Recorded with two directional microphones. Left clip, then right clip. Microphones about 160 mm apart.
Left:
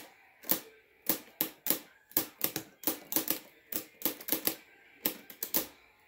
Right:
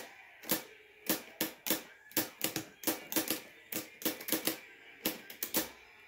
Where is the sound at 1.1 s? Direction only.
40° left (ahead or behind).